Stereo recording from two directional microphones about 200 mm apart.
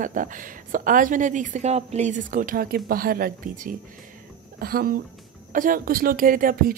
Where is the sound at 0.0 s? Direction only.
40° right (ahead or behind).